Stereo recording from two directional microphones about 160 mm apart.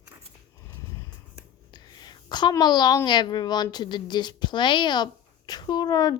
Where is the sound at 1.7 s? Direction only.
25° left (ahead or behind).